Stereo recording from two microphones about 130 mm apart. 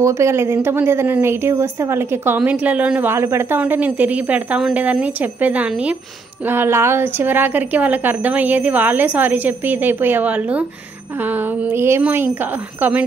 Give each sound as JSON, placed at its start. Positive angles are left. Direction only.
{"t": 0.0, "sound": "a woman's voice", "side_deg": -20}